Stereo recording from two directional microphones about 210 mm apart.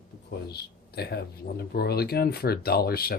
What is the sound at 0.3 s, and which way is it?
Speech, 50° left (ahead or behind).